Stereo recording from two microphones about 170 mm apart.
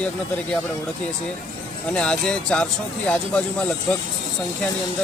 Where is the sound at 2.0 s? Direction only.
5° left (ahead or behind).